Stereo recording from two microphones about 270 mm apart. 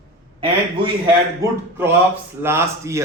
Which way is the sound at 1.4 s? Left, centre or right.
Centre.